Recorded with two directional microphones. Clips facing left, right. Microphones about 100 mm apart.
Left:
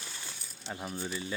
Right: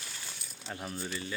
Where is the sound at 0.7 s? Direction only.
10° left (ahead or behind).